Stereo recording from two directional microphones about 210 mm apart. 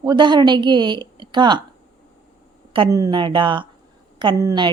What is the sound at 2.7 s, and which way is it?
A woman's voice, 20° right (ahead or behind).